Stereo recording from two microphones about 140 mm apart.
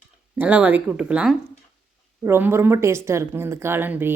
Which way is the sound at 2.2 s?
15° right (ahead or behind).